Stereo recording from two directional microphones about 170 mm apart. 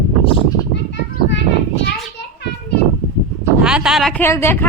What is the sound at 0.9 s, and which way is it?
Children playing, 90° left.